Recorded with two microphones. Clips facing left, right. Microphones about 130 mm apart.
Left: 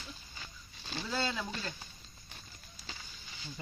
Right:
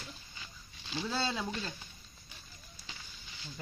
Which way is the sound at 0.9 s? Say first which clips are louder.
Right 4 dB; 45° left (ahead or behind).